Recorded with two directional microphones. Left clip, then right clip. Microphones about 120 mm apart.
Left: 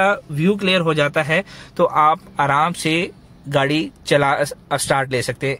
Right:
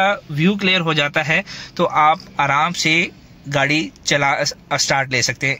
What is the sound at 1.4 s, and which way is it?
Speech, 25° left (ahead or behind).